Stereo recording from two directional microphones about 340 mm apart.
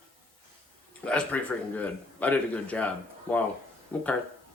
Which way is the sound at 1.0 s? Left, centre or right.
Centre.